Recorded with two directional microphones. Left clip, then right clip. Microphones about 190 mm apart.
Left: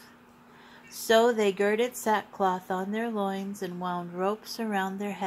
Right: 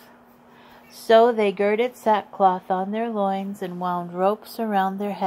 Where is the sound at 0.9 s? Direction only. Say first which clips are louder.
Right 7 dB; 25° right (ahead or behind).